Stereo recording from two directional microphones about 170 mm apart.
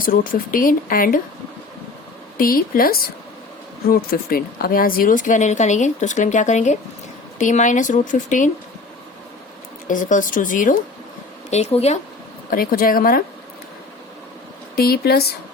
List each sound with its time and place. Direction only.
0.0 s speech: 55° left (ahead or behind)
2.4 s speech: 60° left (ahead or behind)
9.8 s speech: 50° left (ahead or behind)
11.5 s speech: 40° left (ahead or behind)
12.5 s speech: 55° left (ahead or behind)
14.8 s speech: 65° left (ahead or behind)